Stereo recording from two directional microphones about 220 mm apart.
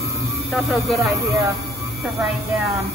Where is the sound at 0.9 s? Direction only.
15° right (ahead or behind).